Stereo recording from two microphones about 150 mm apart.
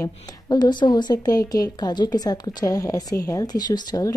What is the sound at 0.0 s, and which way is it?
A woman's voice, 25° left (ahead or behind).